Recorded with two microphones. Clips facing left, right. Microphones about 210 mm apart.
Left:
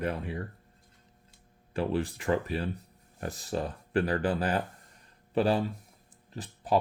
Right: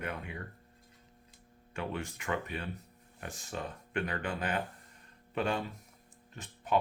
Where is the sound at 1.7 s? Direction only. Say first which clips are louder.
Left 8 dB; 35° left (ahead or behind).